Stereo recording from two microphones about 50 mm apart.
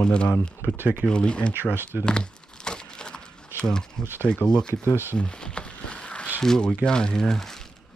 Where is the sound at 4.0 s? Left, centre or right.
Centre.